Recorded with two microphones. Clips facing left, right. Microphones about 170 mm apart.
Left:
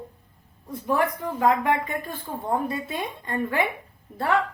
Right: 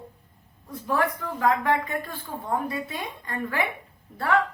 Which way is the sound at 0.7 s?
20° left (ahead or behind).